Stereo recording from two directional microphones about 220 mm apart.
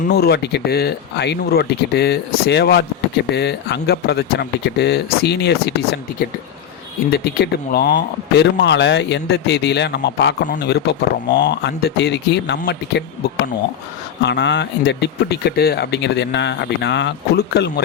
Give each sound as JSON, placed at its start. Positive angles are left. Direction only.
{"t": 0.1, "sound": "a man's voice", "side_deg": 45}
{"t": 14.2, "sound": "a man's voice", "side_deg": 50}